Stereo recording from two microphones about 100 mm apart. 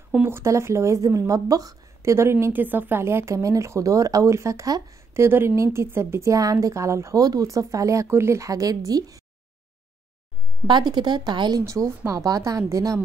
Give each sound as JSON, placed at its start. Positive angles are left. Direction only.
{"t": 0.1, "sound": "a woman's voice", "side_deg": -25}
{"t": 2.4, "sound": "speech", "side_deg": -20}
{"t": 5.1, "sound": "a woman's voice", "side_deg": -25}
{"t": 10.7, "sound": "speech", "side_deg": -45}
{"t": 11.6, "sound": "a woman's voice", "side_deg": -30}